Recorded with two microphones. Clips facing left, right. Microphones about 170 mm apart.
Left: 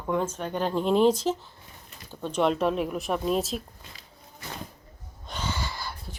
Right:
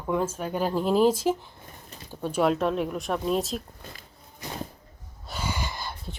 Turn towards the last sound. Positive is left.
turn(degrees=-20)  # may be behind; listen again after turning